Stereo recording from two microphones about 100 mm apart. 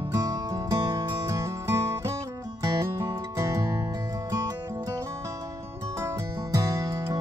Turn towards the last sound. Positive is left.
turn(degrees=-35)  # may be behind; listen again after turning